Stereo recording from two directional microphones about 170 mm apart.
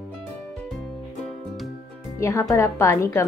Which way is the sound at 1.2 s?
Centre (ahead or behind).